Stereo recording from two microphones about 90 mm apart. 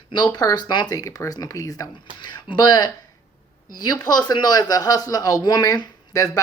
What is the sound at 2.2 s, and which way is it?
Speech, 55° left (ahead or behind).